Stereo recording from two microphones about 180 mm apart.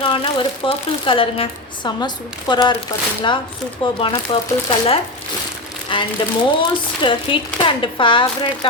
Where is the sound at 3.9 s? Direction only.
30° left (ahead or behind).